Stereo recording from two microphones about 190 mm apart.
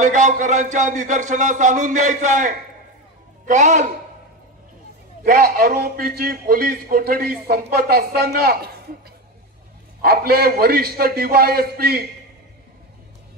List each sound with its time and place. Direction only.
0.0 s speech: 40° right (ahead or behind)
5.2 s a man's voice: 50° right (ahead or behind)
10.0 s a man's voice: 55° right (ahead or behind)